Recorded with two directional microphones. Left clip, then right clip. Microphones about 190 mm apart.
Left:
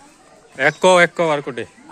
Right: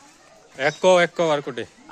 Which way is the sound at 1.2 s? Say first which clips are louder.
Left 3 dB; 25° right (ahead or behind).